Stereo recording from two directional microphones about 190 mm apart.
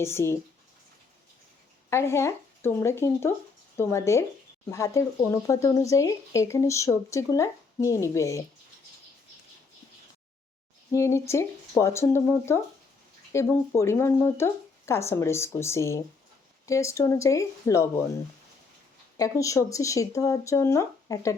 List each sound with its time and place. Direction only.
0.0 s speech: 15° left (ahead or behind)
1.9 s speech: 15° left (ahead or behind)
10.9 s speech: 15° left (ahead or behind)
19.1 s speech: 15° left (ahead or behind)